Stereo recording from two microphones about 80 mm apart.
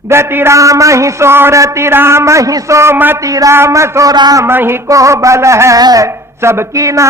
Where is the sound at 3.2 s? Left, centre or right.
Right.